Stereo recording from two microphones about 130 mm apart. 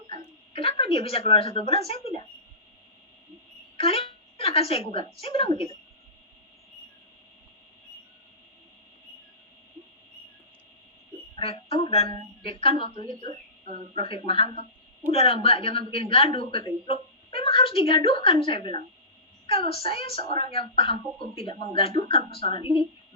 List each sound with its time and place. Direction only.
0.5 s a woman's voice: 45° left (ahead or behind)
3.8 s a sound: 50° left (ahead or behind)
5.2 s a woman's voice: 45° left (ahead or behind)
11.3 s a woman's voice: 45° left (ahead or behind)